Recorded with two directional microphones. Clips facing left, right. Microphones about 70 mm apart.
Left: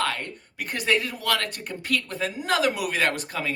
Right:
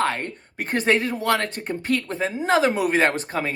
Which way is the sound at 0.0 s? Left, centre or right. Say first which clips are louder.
Right 4 dB; right.